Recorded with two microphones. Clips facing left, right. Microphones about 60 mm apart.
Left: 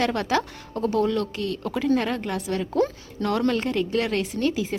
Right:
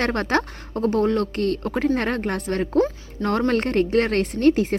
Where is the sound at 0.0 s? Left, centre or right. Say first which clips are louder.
Right 1 dB; right.